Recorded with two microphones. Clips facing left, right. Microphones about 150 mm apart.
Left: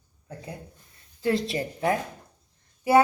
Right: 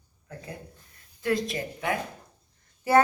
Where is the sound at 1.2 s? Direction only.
30° left (ahead or behind).